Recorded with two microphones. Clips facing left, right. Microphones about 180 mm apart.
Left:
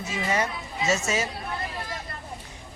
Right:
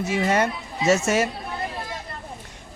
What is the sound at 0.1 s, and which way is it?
Speech, 60° right (ahead or behind).